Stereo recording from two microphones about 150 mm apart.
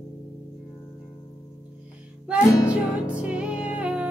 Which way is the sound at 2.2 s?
10° right (ahead or behind).